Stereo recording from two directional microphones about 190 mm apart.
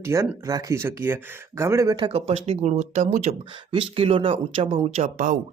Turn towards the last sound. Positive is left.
turn(degrees=-40)  # may be behind; listen again after turning